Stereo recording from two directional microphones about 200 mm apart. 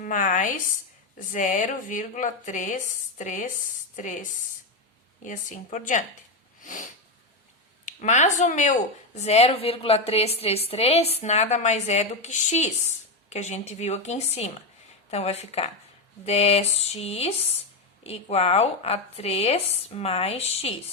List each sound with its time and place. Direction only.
0.0 s a woman's voice: 40° left (ahead or behind)
6.6 s sniff: 40° left (ahead or behind)
7.9 s a woman's voice: 35° left (ahead or behind)